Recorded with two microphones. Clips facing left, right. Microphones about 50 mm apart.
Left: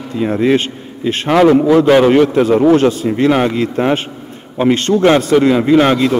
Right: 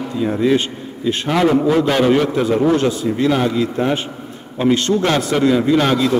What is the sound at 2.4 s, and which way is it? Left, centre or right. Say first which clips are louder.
A man's voice: left 5 dB; left.